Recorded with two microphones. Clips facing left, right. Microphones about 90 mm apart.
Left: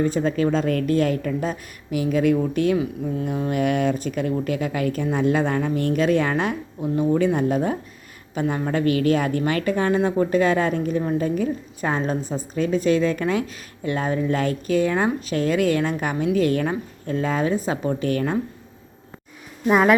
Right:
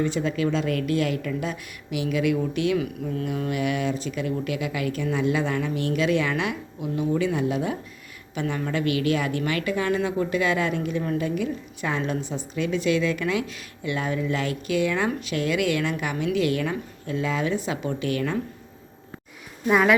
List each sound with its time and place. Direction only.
0.0 s a woman's voice: 40° left (ahead or behind)
2.7 s speech: 25° left (ahead or behind)
3.5 s a woman's voice: 45° left (ahead or behind)